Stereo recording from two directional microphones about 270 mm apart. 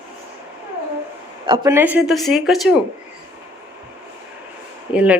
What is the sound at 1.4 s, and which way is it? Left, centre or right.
Speech, centre.